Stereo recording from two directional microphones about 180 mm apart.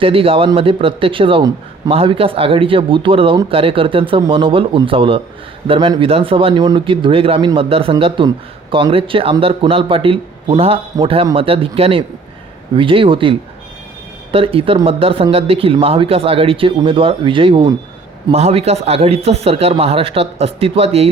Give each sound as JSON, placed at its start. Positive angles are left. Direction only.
{"t": 0.0, "sound": "a man's voice", "side_deg": -30}
{"t": 14.3, "sound": "a man's voice", "side_deg": -30}